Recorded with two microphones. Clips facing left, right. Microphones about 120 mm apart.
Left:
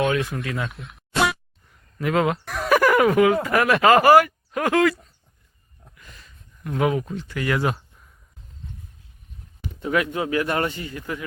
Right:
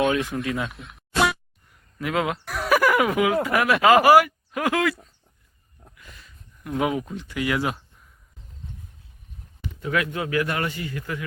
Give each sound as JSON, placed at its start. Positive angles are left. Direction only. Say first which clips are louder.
{"t": 0.3, "sound": "speech", "louder": "right 2 dB", "side_deg": 0}
{"t": 5.8, "sound": "a sound", "louder": "even", "side_deg": -5}
{"t": 6.7, "sound": "speech", "louder": "left 2 dB", "side_deg": -10}
{"t": 9.8, "sound": "a man's voice", "louder": "left 3 dB", "side_deg": 25}